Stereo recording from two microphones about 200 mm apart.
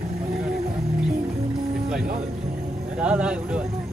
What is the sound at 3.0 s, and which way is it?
Speech, 5° right (ahead or behind).